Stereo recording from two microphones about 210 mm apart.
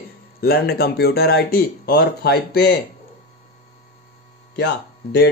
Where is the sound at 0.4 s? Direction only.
45° left (ahead or behind).